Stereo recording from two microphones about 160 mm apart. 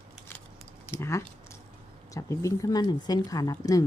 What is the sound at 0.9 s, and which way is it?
Speech, 15° left (ahead or behind).